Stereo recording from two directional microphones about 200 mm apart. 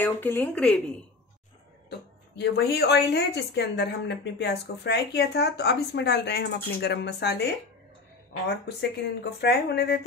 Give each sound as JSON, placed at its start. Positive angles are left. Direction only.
{"t": 0.0, "sound": "speech", "side_deg": 10}
{"t": 1.9, "sound": "a woman's voice", "side_deg": 55}